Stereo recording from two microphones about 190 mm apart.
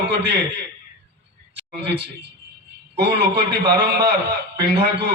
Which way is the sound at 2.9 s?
60° right (ahead or behind).